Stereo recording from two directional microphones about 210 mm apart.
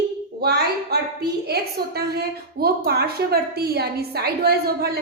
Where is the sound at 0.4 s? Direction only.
50° right (ahead or behind).